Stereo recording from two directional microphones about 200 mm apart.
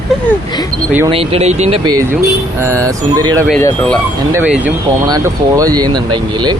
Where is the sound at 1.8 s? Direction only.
20° right (ahead or behind).